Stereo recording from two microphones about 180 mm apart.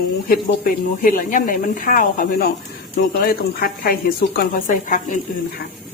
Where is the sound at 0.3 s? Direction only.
50° left (ahead or behind).